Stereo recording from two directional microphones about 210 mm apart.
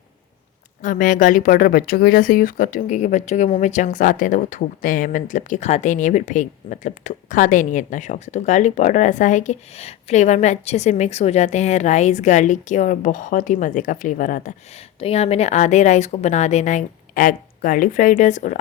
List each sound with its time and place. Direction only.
0.8 s speech: 40° left (ahead or behind)
14.9 s speech: 30° left (ahead or behind)